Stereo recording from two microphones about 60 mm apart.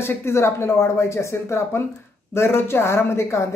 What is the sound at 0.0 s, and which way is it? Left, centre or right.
Speech, left.